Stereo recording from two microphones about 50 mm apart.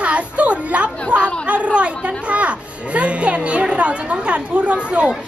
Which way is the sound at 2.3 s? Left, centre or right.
Right.